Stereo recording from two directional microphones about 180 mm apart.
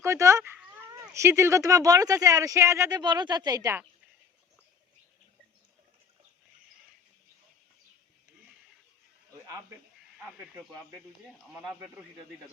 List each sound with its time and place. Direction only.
0.0 s speech: 15° right (ahead or behind)
11.6 s a man's voice: 5° right (ahead or behind)